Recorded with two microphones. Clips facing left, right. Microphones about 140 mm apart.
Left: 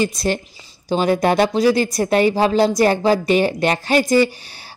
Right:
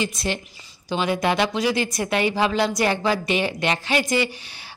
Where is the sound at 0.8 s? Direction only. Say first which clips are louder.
Left 6 dB; 40° left (ahead or behind).